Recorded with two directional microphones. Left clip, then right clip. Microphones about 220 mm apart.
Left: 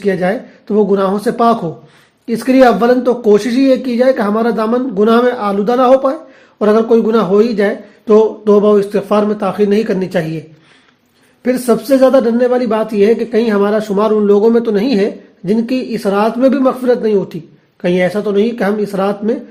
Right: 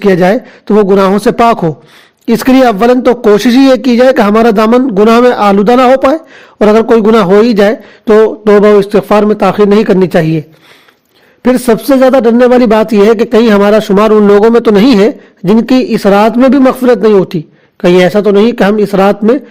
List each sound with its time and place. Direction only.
0.1 s speech: 50° right (ahead or behind)
11.4 s speech: 45° right (ahead or behind)